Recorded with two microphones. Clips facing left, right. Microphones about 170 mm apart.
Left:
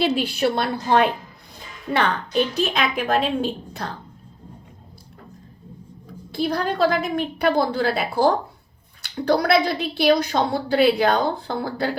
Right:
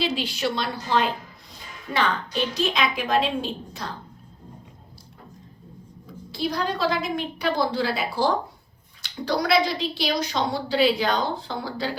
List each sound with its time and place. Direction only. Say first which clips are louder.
0.0 s a woman's voice: left 5 dB; 55° left (ahead or behind)
2.7 s a woman's voice: left 2 dB; 50° left (ahead or behind)
6.3 s a woman's voice: left 3 dB; 55° left (ahead or behind)